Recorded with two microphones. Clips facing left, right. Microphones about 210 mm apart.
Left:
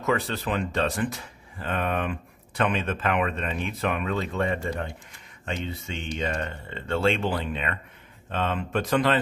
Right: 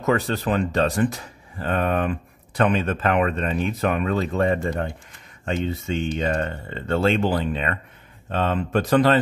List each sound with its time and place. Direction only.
0.0 s speech: 40° right (ahead or behind)
6.1 s speech: 45° right (ahead or behind)